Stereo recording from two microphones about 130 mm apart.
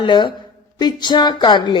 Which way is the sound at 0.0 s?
35° left (ahead or behind).